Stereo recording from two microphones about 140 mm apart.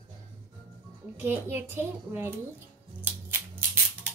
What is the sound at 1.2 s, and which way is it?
A child's voice, 15° right (ahead or behind).